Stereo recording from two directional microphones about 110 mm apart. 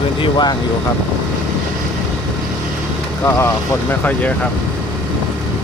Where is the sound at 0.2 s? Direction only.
40° left (ahead or behind).